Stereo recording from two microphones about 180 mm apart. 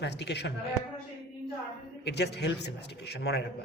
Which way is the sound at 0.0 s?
75° left (ahead or behind).